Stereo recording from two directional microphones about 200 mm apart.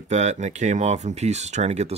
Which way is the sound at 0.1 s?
35° right (ahead or behind).